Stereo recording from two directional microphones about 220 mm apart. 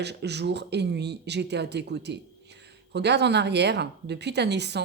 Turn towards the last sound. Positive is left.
turn(degrees=-50)  # may be behind; listen again after turning